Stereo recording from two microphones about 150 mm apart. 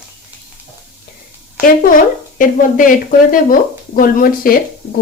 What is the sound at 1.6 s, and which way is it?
Speech, 65° left (ahead or behind).